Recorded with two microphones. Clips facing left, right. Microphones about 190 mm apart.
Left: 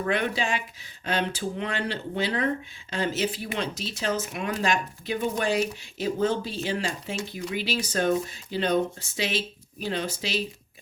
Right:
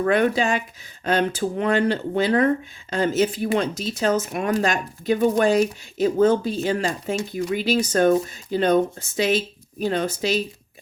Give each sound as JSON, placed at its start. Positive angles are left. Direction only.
{"t": 0.0, "sound": "speech", "side_deg": -45}